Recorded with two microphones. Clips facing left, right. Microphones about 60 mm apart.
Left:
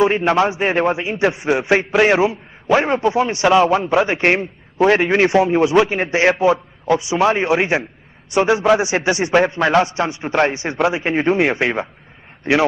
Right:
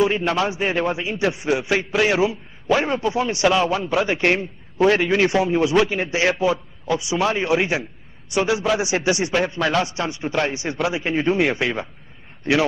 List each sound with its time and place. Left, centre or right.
0.4 s a man's voice: left